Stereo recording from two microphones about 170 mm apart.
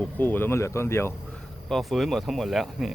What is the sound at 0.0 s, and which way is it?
Speech, 10° left (ahead or behind).